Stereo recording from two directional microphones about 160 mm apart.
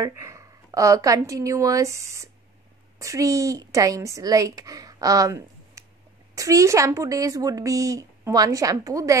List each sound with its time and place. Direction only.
0.0 s a woman's voice: 20° right (ahead or behind)